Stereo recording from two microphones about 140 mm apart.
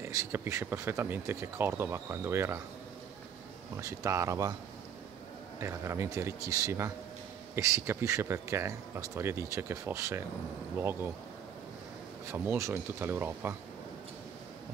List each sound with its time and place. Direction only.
0.0 s speech: 20° right (ahead or behind)
3.7 s speech: 20° right (ahead or behind)
5.6 s speech: 20° right (ahead or behind)
12.3 s speech: 20° right (ahead or behind)